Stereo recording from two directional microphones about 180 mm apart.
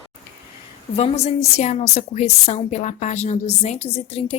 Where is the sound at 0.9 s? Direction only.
35° left (ahead or behind).